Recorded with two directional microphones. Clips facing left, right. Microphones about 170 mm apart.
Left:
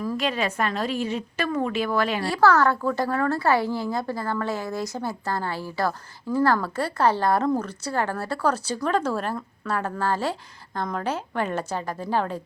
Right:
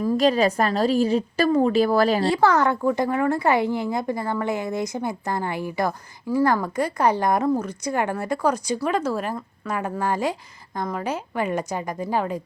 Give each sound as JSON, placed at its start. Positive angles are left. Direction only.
{"t": 0.0, "sound": "a woman's voice", "side_deg": -35}
{"t": 2.2, "sound": "speech", "side_deg": -20}